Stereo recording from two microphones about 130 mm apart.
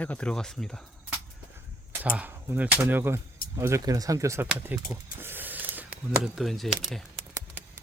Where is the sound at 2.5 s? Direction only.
10° right (ahead or behind).